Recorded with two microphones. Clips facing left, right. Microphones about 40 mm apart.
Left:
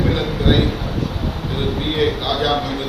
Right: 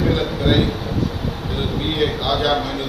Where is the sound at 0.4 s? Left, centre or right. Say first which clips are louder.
Left 1 dB; left.